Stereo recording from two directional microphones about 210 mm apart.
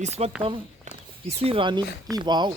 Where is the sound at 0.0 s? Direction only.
30° right (ahead or behind).